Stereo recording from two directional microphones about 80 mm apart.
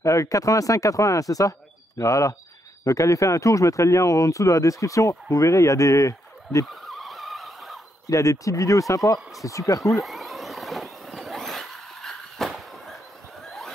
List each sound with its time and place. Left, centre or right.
0.0 s speech: left
6.7 s vehicle: centre
8.1 s speech: left
10.0 s vehicle: centre
13.4 s snicker: centre